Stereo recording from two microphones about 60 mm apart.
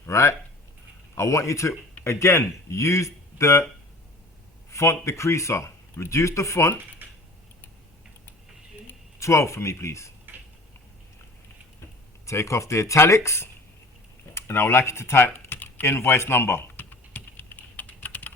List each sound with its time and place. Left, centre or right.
0.0 s speech: left
4.7 s speech: left
9.1 s speech: left
10.3 s a sound: right
12.2 s speech: left
14.3 s typing: left